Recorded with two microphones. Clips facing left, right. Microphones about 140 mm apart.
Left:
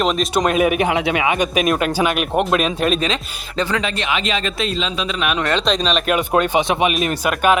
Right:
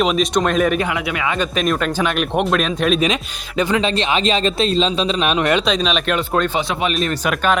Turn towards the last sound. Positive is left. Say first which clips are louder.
# left 2 dB
turn(degrees=10)  # may be behind; listen again after turning